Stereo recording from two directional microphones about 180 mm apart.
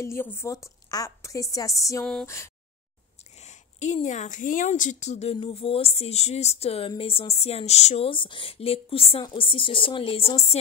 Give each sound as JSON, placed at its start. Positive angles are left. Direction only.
{"t": 0.0, "sound": "a woman's voice", "side_deg": 15}
{"t": 3.4, "sound": "speech", "side_deg": 40}